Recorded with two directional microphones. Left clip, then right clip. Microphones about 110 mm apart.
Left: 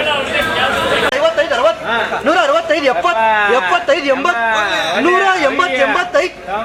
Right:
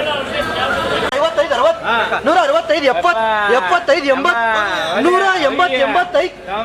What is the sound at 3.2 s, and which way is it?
Speech, 45° right (ahead or behind).